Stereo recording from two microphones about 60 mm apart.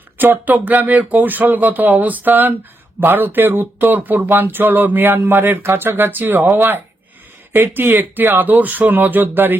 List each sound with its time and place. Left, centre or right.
0.2 s speech: right
7.5 s speech: right